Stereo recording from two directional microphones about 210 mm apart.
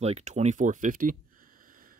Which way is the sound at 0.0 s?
35° right (ahead or behind).